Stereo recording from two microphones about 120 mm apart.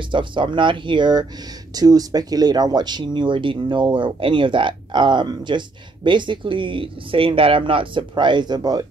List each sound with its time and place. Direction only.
0.1 s speech: 40° right (ahead or behind)